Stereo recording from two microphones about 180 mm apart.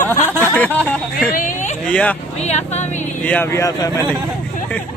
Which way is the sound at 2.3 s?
40° left (ahead or behind).